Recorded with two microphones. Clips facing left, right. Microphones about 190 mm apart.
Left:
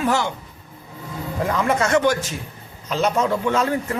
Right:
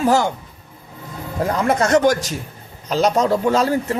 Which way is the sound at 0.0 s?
40° right (ahead or behind).